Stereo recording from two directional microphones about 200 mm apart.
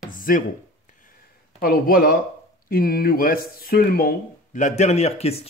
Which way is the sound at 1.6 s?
50° left (ahead or behind).